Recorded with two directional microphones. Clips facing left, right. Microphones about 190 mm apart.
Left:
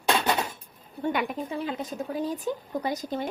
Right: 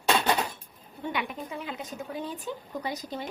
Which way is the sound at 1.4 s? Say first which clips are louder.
Left 5 dB; 35° left (ahead or behind).